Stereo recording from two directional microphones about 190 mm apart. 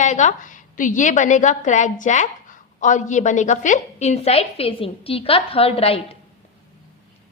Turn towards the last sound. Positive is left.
turn(degrees=30)  # may be behind; listen again after turning